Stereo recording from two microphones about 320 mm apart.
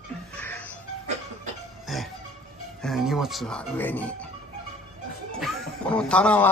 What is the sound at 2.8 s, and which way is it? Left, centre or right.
Speech, centre.